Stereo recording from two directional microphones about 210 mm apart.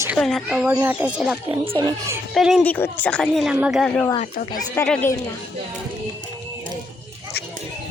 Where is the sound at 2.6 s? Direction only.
10° left (ahead or behind).